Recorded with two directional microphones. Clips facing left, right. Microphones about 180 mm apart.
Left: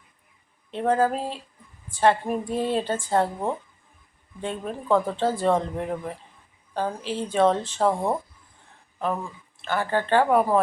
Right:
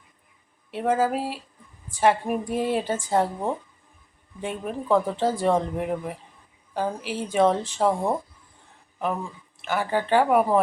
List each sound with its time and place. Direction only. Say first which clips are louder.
0.7 s speech: left 1 dB; 5° right (ahead or behind)
9.6 s speech: even; 10° right (ahead or behind)